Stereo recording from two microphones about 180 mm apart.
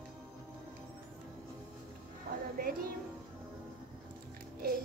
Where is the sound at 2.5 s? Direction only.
55° right (ahead or behind).